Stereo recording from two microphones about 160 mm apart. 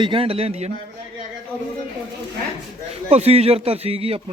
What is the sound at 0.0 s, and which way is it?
Speech, 35° right (ahead or behind).